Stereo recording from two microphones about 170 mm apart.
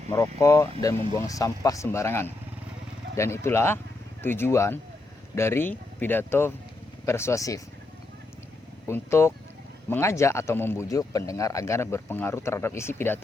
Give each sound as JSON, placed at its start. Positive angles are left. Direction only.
{"t": 0.1, "sound": "speech", "side_deg": 20}
{"t": 8.9, "sound": "speech", "side_deg": 15}